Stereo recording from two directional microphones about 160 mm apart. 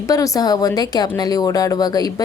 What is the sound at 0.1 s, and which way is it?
Speech, 20° left (ahead or behind).